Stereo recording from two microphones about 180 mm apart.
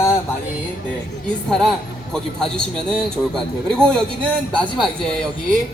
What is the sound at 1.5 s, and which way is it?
A man's voice, centre (ahead or behind).